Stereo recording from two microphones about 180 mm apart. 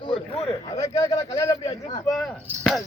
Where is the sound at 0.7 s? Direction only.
20° left (ahead or behind).